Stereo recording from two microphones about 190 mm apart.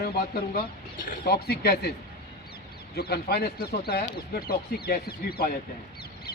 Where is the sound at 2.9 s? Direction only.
55° left (ahead or behind).